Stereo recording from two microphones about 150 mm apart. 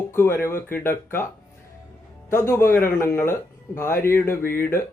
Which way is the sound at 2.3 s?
20° left (ahead or behind).